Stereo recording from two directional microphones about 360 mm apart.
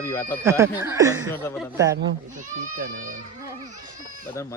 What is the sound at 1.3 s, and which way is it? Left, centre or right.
Speech, centre.